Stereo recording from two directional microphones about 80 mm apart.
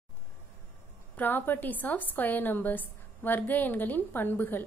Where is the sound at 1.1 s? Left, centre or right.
Left.